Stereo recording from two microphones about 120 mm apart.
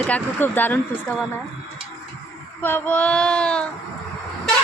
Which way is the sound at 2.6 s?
15° left (ahead or behind).